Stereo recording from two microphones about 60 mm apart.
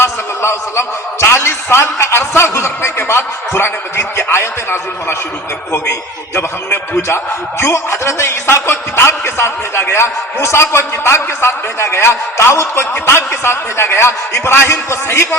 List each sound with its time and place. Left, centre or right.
0.0 s a man's voice: left